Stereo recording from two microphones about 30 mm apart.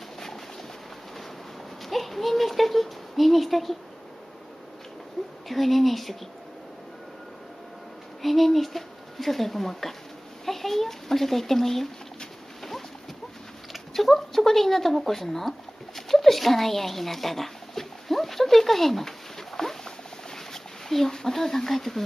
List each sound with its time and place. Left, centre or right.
1.9 s speech: centre
5.2 s a sound: centre
5.5 s speech: centre
8.2 s speech: centre
13.9 s speech: centre
16.1 s a sound: centre